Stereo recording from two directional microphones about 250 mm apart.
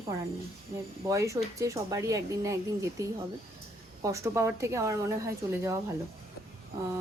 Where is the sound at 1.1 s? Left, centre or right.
Centre.